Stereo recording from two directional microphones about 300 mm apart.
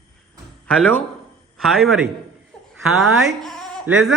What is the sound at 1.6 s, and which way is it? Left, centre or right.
A man's voice, centre.